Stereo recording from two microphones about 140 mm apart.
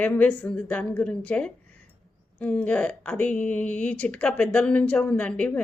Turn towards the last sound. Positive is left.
turn(degrees=10)  # may be behind; listen again after turning